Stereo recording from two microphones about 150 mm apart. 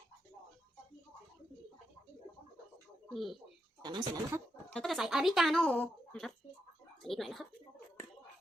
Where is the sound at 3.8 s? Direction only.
30° right (ahead or behind).